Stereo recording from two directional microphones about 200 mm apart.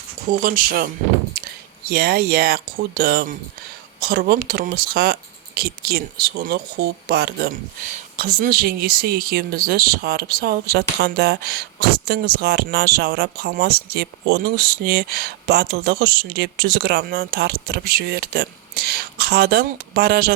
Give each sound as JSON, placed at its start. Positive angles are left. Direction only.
{"t": 0.3, "sound": "speech", "side_deg": -45}
{"t": 1.9, "sound": "speech", "side_deg": -50}